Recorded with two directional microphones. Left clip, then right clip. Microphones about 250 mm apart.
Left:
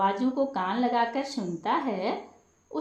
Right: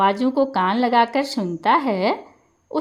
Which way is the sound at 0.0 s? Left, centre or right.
Right.